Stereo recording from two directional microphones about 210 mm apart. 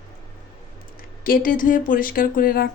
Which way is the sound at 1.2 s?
40° left (ahead or behind).